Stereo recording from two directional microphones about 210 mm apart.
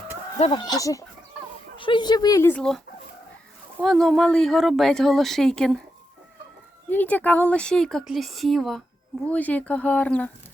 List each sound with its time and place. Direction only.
0.3 s speech: 30° left (ahead or behind)
0.6 s speech: 15° left (ahead or behind)
6.9 s speech: 10° left (ahead or behind)